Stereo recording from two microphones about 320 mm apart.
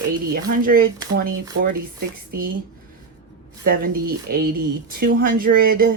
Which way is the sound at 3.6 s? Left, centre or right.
Right.